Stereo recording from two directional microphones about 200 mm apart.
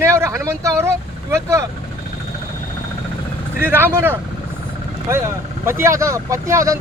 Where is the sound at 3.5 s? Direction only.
10° right (ahead or behind).